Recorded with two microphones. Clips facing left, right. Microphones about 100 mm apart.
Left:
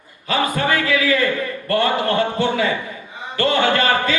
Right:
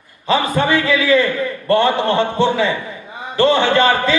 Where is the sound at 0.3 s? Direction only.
25° right (ahead or behind).